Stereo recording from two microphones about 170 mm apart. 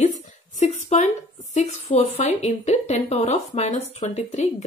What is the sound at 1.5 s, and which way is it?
A woman's voice, 40° left (ahead or behind).